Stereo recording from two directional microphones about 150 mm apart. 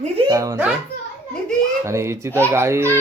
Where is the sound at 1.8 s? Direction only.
20° right (ahead or behind).